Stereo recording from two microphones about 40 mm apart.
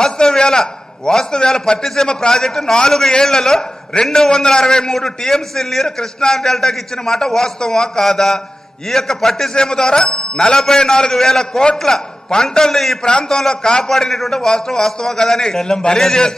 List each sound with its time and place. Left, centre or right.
0.0 s a man's voice: centre
13.0 s a man's voice: left